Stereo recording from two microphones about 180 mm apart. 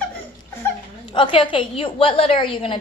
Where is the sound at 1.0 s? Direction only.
30° left (ahead or behind).